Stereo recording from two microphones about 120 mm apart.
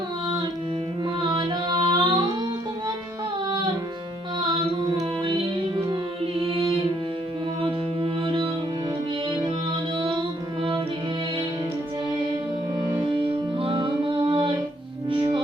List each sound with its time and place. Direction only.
1.2 s music: 40° right (ahead or behind)
4.4 s music: 40° right (ahead or behind)
10.0 s music: 45° right (ahead or behind)
13.6 s music: 45° right (ahead or behind)